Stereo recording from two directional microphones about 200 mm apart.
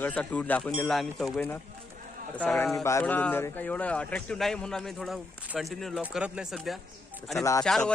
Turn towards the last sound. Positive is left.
turn(degrees=5)  # may be behind; listen again after turning